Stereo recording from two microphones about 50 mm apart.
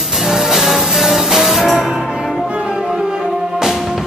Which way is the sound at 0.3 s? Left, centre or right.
Centre.